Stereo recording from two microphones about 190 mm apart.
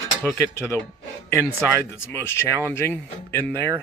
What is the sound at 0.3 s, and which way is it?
Speech, 10° left (ahead or behind).